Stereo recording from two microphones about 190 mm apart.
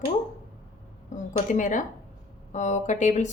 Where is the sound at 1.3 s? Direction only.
45° left (ahead or behind).